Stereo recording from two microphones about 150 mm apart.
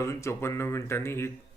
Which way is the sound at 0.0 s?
20° left (ahead or behind).